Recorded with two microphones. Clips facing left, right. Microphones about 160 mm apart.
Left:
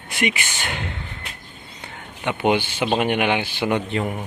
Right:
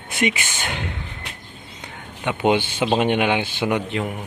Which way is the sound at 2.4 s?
20° right (ahead or behind).